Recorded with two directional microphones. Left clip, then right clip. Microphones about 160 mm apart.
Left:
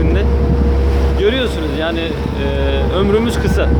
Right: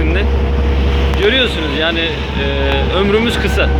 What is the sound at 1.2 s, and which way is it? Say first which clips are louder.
Speech: right 3 dB; 10° left (ahead or behind).